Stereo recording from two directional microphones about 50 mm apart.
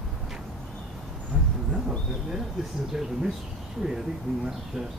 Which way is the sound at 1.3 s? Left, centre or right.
Right.